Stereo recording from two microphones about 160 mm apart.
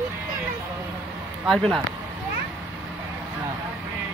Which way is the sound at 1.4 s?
Centre (ahead or behind).